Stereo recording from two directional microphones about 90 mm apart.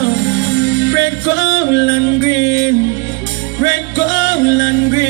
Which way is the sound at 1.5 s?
30° right (ahead or behind).